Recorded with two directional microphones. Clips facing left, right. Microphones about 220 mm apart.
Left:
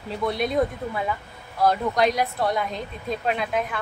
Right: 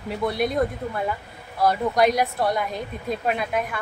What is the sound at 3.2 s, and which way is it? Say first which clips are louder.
Speech: even; 5° right (ahead or behind).